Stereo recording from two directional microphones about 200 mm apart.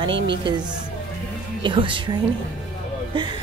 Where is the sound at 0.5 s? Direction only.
25° right (ahead or behind).